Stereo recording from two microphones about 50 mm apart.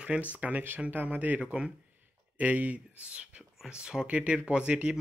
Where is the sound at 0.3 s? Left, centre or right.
Right.